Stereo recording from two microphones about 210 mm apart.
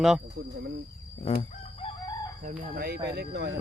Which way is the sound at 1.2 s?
25° left (ahead or behind).